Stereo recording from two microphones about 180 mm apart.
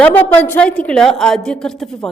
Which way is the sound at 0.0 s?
10° left (ahead or behind).